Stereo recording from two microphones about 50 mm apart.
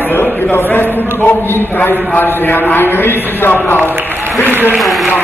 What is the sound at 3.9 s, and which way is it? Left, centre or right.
Speech, right.